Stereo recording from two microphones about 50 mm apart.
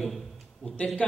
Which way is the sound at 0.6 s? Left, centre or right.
Left.